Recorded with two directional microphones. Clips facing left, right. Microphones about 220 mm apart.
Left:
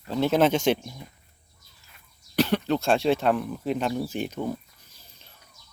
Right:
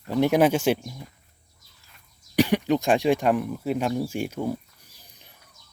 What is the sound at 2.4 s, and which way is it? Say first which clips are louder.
Speech: right 2 dB; 15° right (ahead or behind).